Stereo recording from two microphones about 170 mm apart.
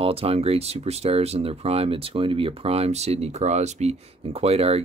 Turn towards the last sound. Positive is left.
turn(degrees=-35)  # may be behind; listen again after turning